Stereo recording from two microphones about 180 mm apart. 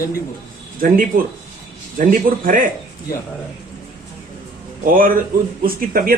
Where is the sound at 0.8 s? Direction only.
50° right (ahead or behind).